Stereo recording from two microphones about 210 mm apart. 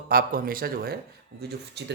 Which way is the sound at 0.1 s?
45° right (ahead or behind).